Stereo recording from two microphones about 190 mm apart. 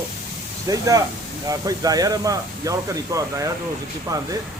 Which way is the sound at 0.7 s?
20° right (ahead or behind).